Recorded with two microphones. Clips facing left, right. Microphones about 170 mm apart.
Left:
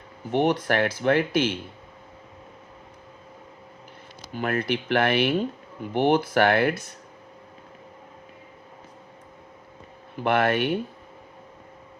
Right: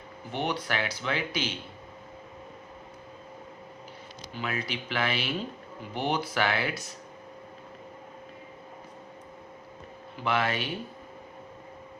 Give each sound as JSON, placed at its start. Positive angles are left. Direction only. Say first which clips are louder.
{"t": 0.3, "sound": "speech", "louder": "left 9 dB", "side_deg": 50}
{"t": 4.3, "sound": "speech", "louder": "left 8 dB", "side_deg": 50}
{"t": 10.2, "sound": "speech", "louder": "left 7 dB", "side_deg": 55}